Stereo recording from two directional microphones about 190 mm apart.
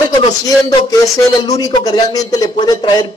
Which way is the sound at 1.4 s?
20° left (ahead or behind).